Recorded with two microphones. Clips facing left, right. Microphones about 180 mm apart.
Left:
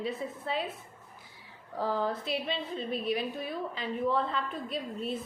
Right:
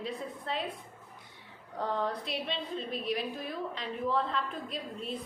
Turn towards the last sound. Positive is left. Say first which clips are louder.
# left 4 dB
turn(degrees=0)  # may be behind; listen again after turning